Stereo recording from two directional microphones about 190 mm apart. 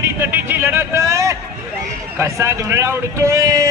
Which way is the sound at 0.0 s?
10° right (ahead or behind).